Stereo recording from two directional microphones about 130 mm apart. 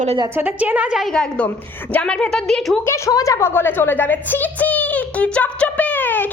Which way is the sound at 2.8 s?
20° left (ahead or behind).